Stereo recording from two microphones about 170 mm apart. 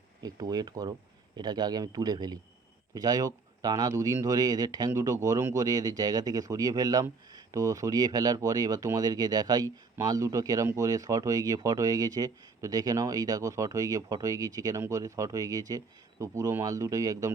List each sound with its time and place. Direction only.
0.2 s speech: 20° right (ahead or behind)